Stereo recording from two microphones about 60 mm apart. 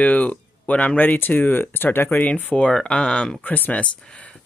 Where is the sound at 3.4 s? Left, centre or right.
Left.